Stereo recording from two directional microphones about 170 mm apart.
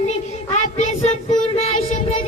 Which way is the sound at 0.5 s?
40° left (ahead or behind).